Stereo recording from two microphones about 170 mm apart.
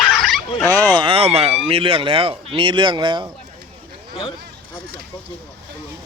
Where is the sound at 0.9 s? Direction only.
30° right (ahead or behind).